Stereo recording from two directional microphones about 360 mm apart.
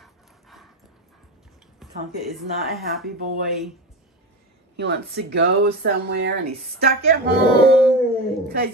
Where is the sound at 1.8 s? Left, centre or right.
Centre.